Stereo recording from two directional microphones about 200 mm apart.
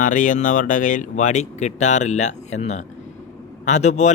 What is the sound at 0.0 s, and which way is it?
Speech, 40° left (ahead or behind).